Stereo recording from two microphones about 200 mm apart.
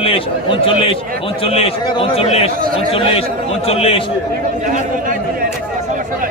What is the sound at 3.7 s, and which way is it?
Speech, 30° left (ahead or behind).